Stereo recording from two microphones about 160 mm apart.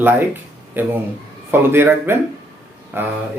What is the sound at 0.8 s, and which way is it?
Speech, 15° right (ahead or behind).